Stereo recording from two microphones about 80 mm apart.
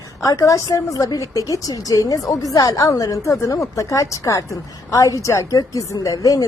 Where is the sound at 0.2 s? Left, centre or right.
Left.